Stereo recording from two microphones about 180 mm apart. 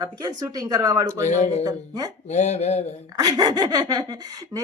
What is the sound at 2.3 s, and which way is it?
Speech, 40° left (ahead or behind).